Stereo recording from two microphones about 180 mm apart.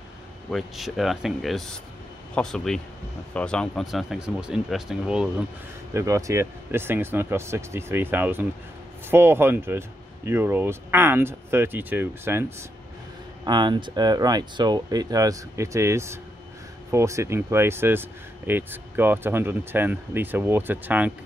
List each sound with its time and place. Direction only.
0.5 s speech: centre (ahead or behind)
5.9 s speech: 15° right (ahead or behind)
13.4 s speech: 25° right (ahead or behind); by 21.1 s 10° right (ahead or behind)